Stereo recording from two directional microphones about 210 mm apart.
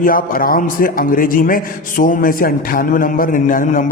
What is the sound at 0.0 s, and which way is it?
A man's voice, 40° left (ahead or behind).